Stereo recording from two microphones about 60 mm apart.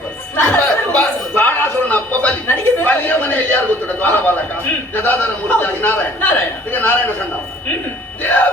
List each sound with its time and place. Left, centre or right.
0.5 s chuckle: left
4.9 s a man's voice: left
8.2 s music: left